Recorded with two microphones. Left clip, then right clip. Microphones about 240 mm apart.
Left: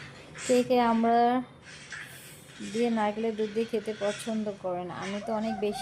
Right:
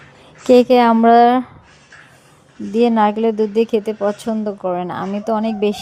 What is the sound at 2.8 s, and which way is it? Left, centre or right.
Speech, right.